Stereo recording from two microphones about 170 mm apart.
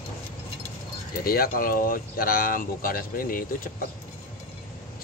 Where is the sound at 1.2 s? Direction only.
60° left (ahead or behind).